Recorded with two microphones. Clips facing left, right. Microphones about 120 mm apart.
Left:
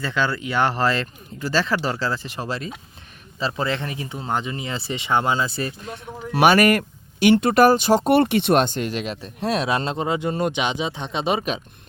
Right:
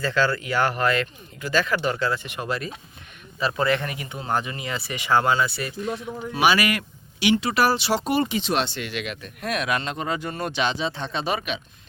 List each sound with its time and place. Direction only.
0.0 s speech: 20° left (ahead or behind)
6.4 s speech: 50° left (ahead or behind); by 11.4 s 20° left (ahead or behind)